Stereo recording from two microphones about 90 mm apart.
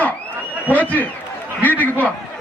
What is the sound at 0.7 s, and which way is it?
Speech, 20° left (ahead or behind).